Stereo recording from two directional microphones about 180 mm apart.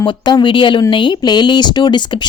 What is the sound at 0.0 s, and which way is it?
Speech, 25° left (ahead or behind).